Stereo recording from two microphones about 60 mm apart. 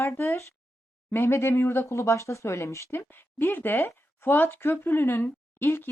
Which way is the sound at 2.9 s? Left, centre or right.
Left.